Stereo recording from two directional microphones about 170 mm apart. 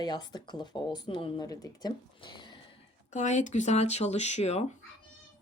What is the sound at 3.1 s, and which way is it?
Speech, 45° left (ahead or behind).